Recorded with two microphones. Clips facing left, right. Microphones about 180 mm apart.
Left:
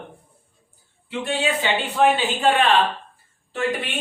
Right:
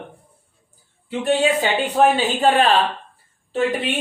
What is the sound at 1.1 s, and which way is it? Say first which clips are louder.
Speech: right 6 dB; 40° right (ahead or behind).